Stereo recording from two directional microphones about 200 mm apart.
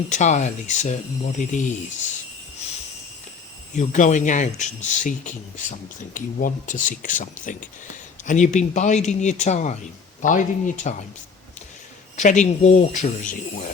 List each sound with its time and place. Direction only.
0.1 s speech: 35° left (ahead or behind)
3.8 s speech: 40° left (ahead or behind)
12.1 s speech: 35° left (ahead or behind)